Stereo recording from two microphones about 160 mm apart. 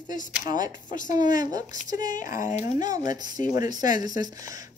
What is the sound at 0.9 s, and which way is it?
Speech, 55° left (ahead or behind).